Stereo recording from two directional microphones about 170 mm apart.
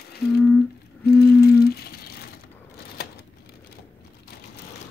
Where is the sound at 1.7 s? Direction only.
70° left (ahead or behind).